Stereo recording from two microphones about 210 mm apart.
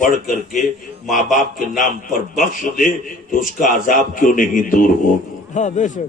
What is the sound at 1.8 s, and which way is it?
A man's voice, 40° left (ahead or behind).